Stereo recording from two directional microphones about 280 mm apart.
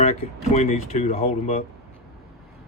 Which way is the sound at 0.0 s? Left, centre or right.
Left.